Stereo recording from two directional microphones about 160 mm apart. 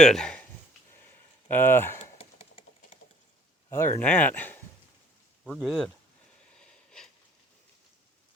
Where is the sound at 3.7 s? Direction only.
15° left (ahead or behind).